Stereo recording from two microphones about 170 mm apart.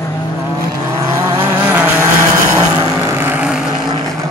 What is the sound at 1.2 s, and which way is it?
Vehicle, 15° right (ahead or behind).